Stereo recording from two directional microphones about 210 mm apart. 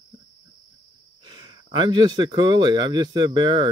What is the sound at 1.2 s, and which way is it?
Speech, 20° right (ahead or behind).